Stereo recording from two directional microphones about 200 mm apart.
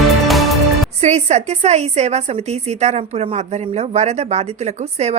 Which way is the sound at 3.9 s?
35° right (ahead or behind).